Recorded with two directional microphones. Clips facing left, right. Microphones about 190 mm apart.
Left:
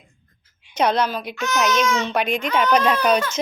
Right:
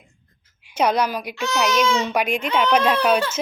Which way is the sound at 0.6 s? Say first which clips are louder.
Even; 10° right (ahead or behind).